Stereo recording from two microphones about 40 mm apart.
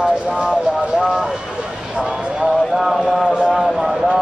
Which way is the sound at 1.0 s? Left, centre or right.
Centre.